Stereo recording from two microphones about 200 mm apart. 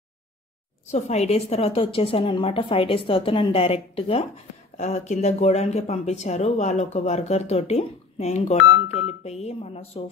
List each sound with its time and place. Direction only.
0.9 s a woman's voice: 35° left (ahead or behind)